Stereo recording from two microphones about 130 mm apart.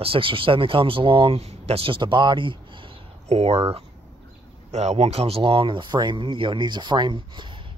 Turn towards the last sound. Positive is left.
turn(degrees=-35)  # may be behind; listen again after turning